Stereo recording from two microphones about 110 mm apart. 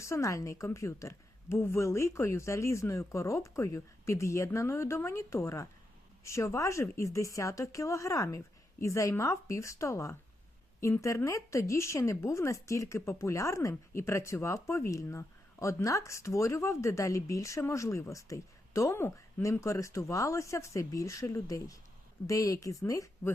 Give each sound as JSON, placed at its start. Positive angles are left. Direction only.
{"t": 0.0, "sound": "speech", "side_deg": 25}